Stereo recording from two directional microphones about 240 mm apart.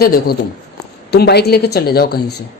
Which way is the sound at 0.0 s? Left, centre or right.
Left.